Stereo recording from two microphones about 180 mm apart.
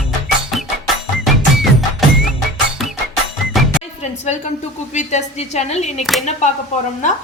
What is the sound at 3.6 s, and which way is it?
Music, centre (ahead or behind).